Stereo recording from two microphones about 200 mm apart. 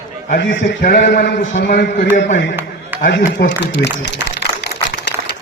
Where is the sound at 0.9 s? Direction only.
55° left (ahead or behind).